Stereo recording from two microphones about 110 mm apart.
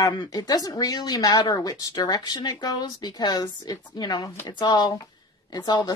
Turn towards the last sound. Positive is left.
turn(degrees=40)  # may be behind; listen again after turning